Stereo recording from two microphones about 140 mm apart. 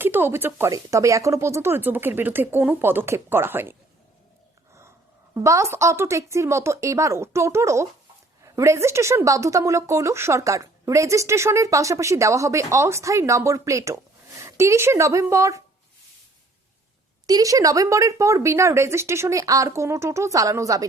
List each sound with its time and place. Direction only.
0.0 s speech: 15° right (ahead or behind)
5.3 s a woman's voice: 20° right (ahead or behind)
17.2 s a woman's voice: 25° right (ahead or behind)